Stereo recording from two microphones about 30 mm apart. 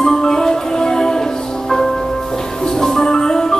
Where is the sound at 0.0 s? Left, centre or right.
Centre.